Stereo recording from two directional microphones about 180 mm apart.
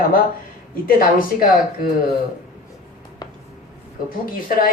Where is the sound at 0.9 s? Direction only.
55° left (ahead or behind).